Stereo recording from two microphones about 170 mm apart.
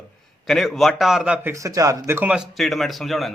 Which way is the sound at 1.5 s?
20° right (ahead or behind).